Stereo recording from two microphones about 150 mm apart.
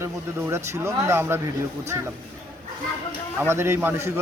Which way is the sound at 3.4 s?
15° right (ahead or behind).